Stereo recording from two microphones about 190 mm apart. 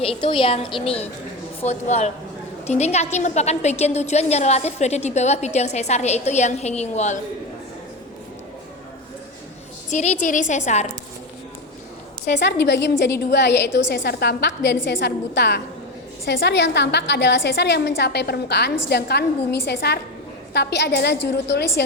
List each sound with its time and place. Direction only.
0.0 s a woman's voice: 25° left (ahead or behind)
9.9 s a woman's voice: 40° left (ahead or behind)
12.2 s a woman's voice: 65° left (ahead or behind)